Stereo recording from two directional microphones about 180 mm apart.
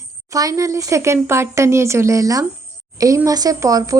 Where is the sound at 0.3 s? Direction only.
20° right (ahead or behind).